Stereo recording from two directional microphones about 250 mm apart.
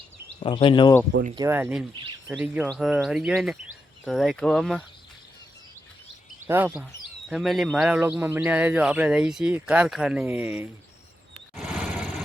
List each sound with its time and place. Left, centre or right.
0.3 s speech: left
1.4 s speech: centre
6.5 s speech: centre
11.5 s a sound: centre